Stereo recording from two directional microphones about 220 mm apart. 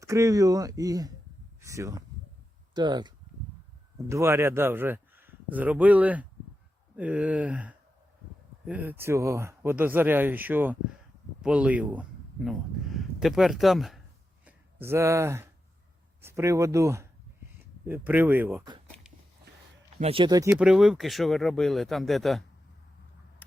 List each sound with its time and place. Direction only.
0.0 s speech: 15° right (ahead or behind)
4.1 s speech: 10° right (ahead or behind)
20.0 s speech: 25° right (ahead or behind)
20.5 s speech: 5° right (ahead or behind)